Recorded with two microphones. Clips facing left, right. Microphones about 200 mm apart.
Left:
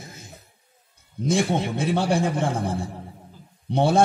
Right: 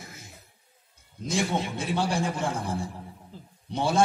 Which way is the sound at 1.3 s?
60° left (ahead or behind).